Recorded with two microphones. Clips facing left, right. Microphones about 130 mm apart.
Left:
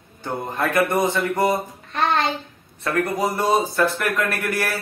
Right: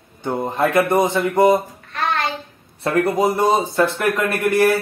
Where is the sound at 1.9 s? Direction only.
25° left (ahead or behind).